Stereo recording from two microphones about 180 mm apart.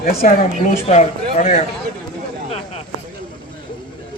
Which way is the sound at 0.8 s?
40° left (ahead or behind).